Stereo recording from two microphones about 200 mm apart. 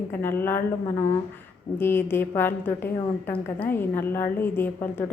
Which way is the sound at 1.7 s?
10° left (ahead or behind).